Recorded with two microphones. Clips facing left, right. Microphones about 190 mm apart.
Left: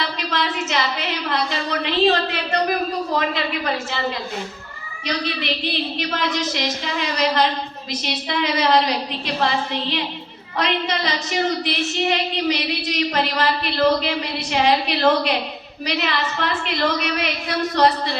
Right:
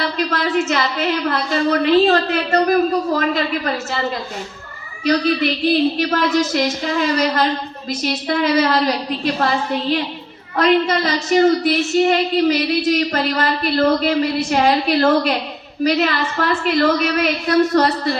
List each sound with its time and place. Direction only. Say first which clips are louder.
0.3 s a woman's voice: right 3 dB; 50° right (ahead or behind)
5.0 s a woman's voice: right 9 dB; 45° right (ahead or behind)